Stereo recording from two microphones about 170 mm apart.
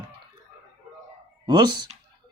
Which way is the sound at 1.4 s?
25° right (ahead or behind).